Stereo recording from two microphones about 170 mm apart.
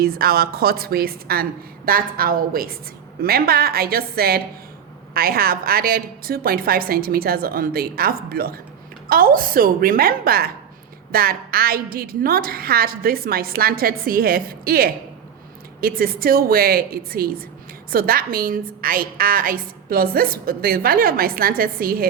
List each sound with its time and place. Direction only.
0.0 s a woman's voice: 65° right (ahead or behind)